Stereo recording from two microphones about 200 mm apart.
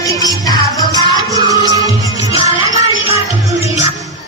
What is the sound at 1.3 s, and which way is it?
Music, 20° right (ahead or behind).